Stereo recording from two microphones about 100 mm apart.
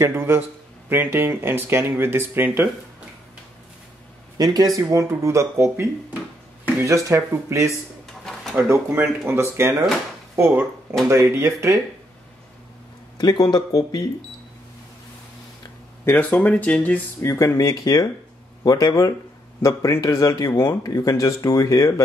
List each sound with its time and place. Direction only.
0.0 s speech: 25° right (ahead or behind)
4.4 s speech: 40° right (ahead or behind)
13.2 s speech: 45° left (ahead or behind)
16.1 s speech: 15° left (ahead or behind)
17.2 s speech: 30° left (ahead or behind)